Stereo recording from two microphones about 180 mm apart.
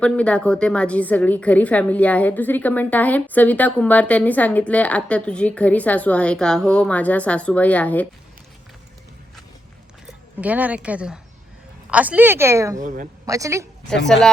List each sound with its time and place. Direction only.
0.0 s a woman's voice: 5° left (ahead or behind)
10.1 s a woman's voice: 10° right (ahead or behind)
12.8 s speech: 45° right (ahead or behind)
13.2 s a woman's voice: 20° right (ahead or behind)